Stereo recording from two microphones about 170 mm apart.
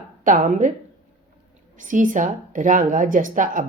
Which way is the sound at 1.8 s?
50° right (ahead or behind).